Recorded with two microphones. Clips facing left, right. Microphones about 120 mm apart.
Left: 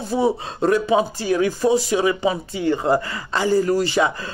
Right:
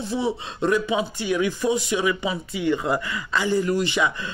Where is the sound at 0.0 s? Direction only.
45° left (ahead or behind).